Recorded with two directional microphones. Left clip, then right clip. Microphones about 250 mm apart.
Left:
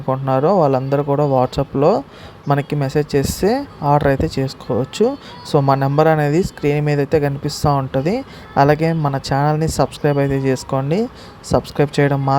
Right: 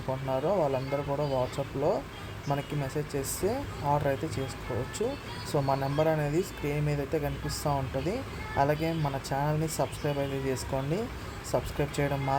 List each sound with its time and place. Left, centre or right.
0.1 s speech: left